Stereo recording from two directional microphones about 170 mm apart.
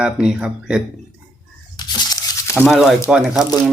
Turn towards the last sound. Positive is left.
turn(degrees=0)  # may be behind; listen again after turning